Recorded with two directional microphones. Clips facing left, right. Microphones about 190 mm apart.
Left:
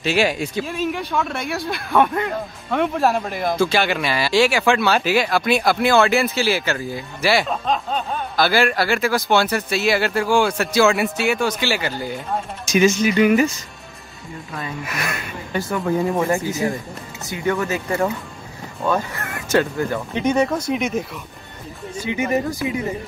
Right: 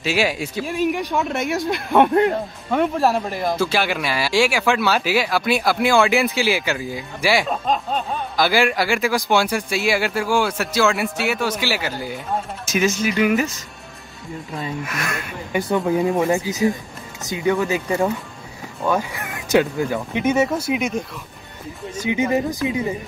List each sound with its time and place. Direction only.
0.0 s speech: 5° right (ahead or behind); by 2.2 s 30° right (ahead or behind)
2.7 s speech: centre (ahead or behind)
8.4 s speech: 15° right (ahead or behind)
14.9 s speech: 5° left (ahead or behind)
15.7 s speech: 15° right (ahead or behind)
22.0 s speech: 15° right (ahead or behind)